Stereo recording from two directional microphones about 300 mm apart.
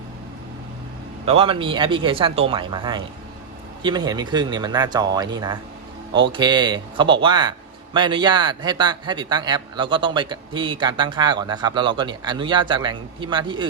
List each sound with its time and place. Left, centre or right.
1.2 s a man's voice: centre